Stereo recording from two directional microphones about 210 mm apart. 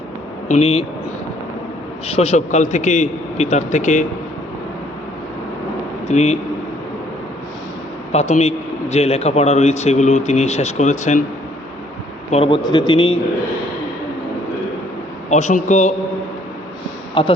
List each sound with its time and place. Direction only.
0.4 s speech: 30° left (ahead or behind)
2.0 s a man's voice: 30° left (ahead or behind)
6.1 s a man's voice: 30° left (ahead or behind)
8.1 s a man's voice: 30° left (ahead or behind)
12.3 s speech: 25° left (ahead or behind)
15.3 s a man's voice: 35° left (ahead or behind)